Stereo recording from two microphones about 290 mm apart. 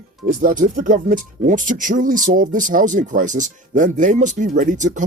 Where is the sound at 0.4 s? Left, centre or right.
Right.